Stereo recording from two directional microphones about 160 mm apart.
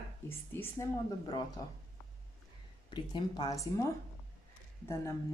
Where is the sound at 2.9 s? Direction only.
25° left (ahead or behind).